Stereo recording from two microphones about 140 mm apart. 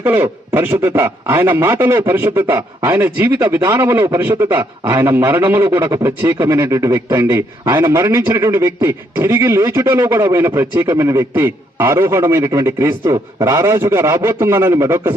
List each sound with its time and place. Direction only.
0.0 s a man's voice: 15° right (ahead or behind)